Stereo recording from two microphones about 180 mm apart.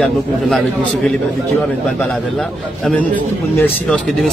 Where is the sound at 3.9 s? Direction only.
Centre (ahead or behind).